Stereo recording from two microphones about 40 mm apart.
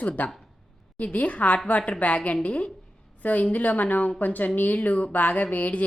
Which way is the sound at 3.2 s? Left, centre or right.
Left.